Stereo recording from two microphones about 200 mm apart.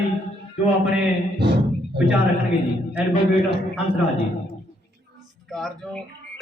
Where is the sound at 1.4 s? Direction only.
60° right (ahead or behind).